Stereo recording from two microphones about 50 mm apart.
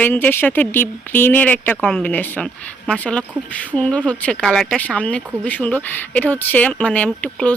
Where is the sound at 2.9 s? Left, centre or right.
Left.